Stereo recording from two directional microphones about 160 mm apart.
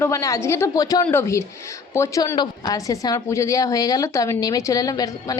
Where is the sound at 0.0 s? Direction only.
20° left (ahead or behind).